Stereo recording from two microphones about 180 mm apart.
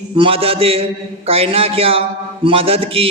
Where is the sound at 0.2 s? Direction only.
30° right (ahead or behind).